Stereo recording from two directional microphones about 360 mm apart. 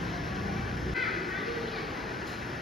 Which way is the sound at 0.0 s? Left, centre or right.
Centre.